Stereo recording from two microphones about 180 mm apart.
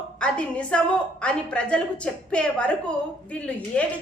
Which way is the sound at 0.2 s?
5° left (ahead or behind).